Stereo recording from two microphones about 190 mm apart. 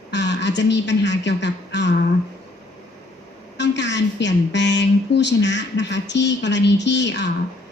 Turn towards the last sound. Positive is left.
turn(degrees=65)  # may be behind; listen again after turning